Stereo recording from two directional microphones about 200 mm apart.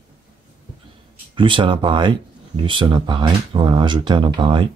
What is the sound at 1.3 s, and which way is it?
Speech, 25° right (ahead or behind).